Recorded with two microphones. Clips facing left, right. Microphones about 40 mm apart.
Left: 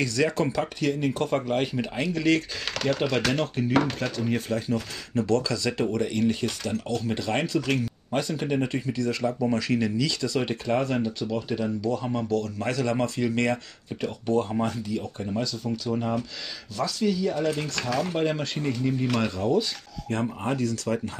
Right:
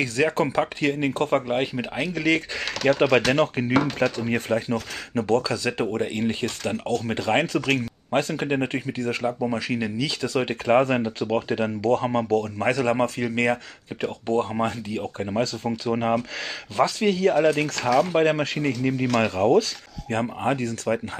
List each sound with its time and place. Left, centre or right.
0.0 s speech: right
1.5 s speech: right
3.3 s speech: right
9.4 s speech: right
14.2 s speech: right
14.5 s speech: right
15.9 s speech: right
18.4 s speech: right